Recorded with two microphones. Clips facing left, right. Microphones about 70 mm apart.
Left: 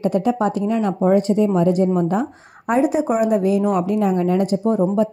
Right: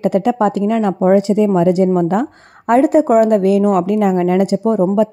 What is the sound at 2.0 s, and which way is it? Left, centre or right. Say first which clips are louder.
Speech: right 4 dB; right.